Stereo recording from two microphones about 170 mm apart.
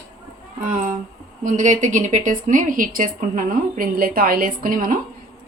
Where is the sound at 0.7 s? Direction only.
55° right (ahead or behind).